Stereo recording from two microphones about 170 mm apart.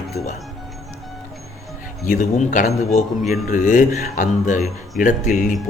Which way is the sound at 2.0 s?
50° left (ahead or behind).